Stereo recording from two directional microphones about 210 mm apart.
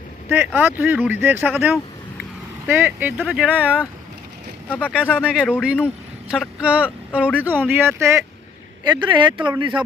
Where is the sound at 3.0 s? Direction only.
5° right (ahead or behind).